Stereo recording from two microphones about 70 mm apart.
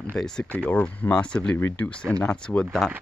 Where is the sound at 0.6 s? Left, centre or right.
Left.